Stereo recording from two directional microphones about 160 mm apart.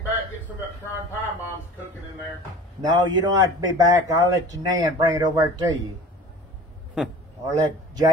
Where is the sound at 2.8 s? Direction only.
25° right (ahead or behind).